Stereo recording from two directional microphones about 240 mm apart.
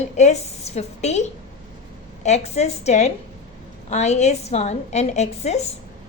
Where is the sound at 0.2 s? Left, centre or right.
Left.